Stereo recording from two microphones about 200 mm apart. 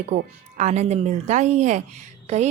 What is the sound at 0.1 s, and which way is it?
Speech, 35° right (ahead or behind).